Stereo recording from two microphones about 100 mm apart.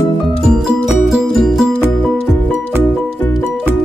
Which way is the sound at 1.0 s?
Centre (ahead or behind).